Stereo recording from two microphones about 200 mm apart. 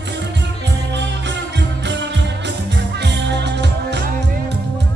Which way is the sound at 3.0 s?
60° right (ahead or behind).